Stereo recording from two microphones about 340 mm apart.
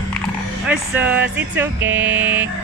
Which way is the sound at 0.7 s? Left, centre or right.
Centre.